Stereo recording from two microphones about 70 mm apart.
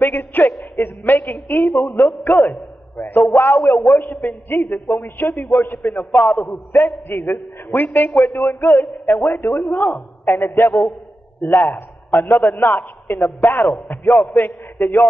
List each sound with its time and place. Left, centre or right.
0.0 s a man's voice: left